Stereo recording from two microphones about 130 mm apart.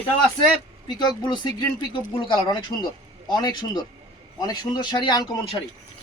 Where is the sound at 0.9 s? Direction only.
35° left (ahead or behind).